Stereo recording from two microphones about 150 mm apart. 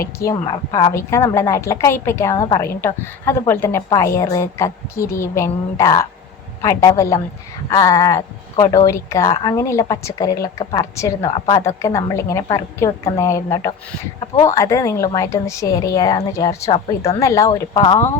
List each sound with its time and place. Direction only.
0.4 s a woman's voice: 30° left (ahead or behind)
0.9 s a woman's voice: 20° left (ahead or behind)
16.7 s a woman's voice: 40° left (ahead or behind)
17.2 s speech: 20° left (ahead or behind)
17.7 s a woman's voice: 35° left (ahead or behind)